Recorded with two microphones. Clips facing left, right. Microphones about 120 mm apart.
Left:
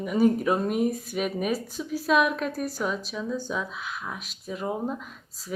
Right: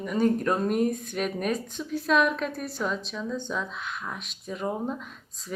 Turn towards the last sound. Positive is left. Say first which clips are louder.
# even
turn(degrees=5)  # may be behind; listen again after turning